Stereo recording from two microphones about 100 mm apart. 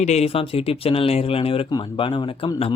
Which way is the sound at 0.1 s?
85° left.